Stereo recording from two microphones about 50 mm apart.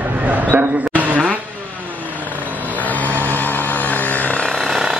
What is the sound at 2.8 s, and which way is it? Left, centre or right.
Vehicle, left.